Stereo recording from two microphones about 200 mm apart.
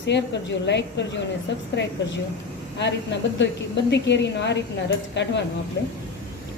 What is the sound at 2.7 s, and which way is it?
A woman's voice, 60° left (ahead or behind).